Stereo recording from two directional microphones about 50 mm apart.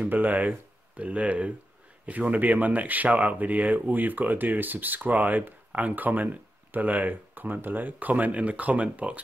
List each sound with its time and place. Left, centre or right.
0.1 s speech: right